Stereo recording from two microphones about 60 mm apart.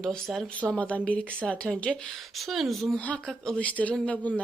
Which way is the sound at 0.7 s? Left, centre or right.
Centre.